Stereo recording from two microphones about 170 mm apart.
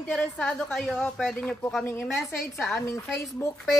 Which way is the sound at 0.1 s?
10° left (ahead or behind).